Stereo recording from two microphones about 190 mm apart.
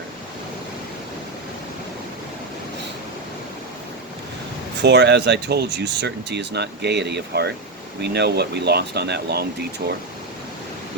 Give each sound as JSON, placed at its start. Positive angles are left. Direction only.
{"t": 4.8, "sound": "speech", "side_deg": -60}